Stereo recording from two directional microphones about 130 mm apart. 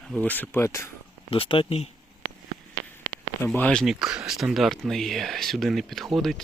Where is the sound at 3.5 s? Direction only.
10° left (ahead or behind).